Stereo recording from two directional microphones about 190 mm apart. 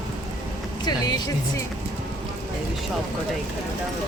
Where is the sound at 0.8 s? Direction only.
20° left (ahead or behind).